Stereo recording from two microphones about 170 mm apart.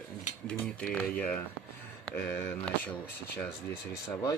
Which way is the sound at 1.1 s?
10° left (ahead or behind).